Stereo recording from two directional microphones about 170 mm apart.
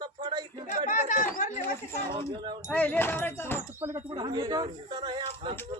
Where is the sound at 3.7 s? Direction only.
20° right (ahead or behind).